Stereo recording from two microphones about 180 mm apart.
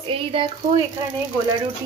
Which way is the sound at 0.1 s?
30° right (ahead or behind).